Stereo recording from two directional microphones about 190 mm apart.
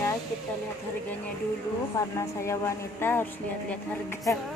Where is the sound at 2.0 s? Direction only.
15° left (ahead or behind).